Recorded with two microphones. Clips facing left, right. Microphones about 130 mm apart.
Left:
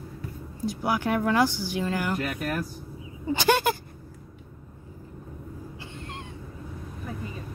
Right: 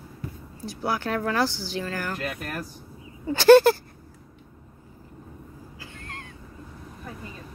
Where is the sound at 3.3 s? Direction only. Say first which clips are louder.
Right 9 dB; 15° left (ahead or behind).